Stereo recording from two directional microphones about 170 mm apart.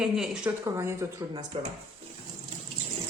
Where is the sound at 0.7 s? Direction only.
15° right (ahead or behind).